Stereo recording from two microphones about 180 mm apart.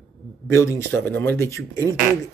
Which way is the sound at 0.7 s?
10° left (ahead or behind).